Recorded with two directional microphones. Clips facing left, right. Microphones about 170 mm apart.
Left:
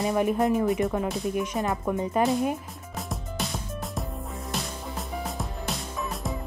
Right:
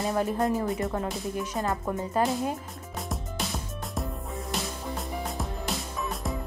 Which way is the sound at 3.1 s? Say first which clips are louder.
Left 1 dB; centre (ahead or behind).